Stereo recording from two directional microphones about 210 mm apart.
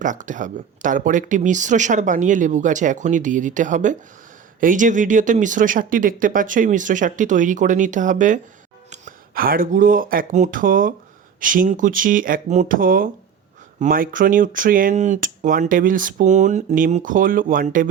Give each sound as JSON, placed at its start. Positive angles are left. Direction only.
{"t": 0.0, "sound": "speech", "side_deg": -40}